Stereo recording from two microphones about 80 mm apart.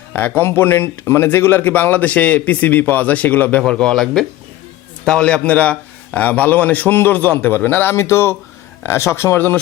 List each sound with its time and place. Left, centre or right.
0.1 s speech: left
3.7 s a man's voice: centre; by 9.6 s left